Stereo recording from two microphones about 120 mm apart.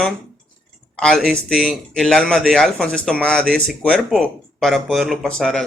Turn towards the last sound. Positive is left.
turn(degrees=5)  # may be behind; listen again after turning